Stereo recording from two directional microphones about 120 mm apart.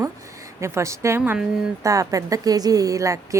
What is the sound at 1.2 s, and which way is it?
Speech, 10° right (ahead or behind).